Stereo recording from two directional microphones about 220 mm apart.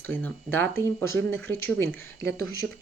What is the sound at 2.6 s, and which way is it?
Speech, 65° right (ahead or behind).